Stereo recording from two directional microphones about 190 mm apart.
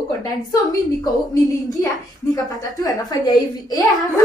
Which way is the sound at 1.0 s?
20° left (ahead or behind).